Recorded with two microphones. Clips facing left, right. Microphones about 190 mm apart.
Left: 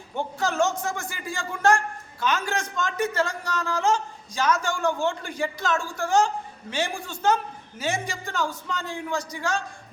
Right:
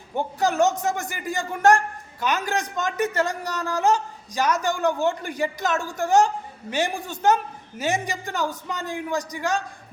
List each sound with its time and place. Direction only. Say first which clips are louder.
0.2 s a man's voice: right 3 dB; 15° right (ahead or behind)